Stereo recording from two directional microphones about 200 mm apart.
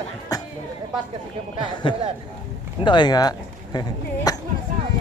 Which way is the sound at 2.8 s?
20° left (ahead or behind).